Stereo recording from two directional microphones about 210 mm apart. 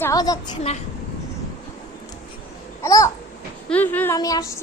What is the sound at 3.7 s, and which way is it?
Speech, 10° left (ahead or behind).